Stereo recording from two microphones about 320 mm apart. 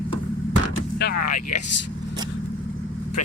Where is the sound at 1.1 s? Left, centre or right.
Left.